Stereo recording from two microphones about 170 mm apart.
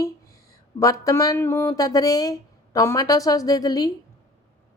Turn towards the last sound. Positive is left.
turn(degrees=20)  # may be behind; listen again after turning